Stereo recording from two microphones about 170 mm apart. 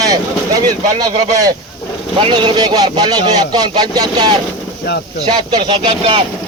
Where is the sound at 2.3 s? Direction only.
25° right (ahead or behind).